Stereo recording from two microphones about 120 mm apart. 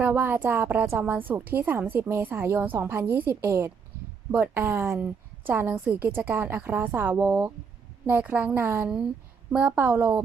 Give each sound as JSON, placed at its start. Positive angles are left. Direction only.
{"t": 0.0, "sound": "a woman's voice", "side_deg": -15}